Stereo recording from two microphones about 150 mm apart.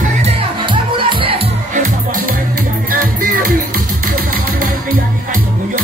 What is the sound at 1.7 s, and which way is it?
Music, 65° right (ahead or behind).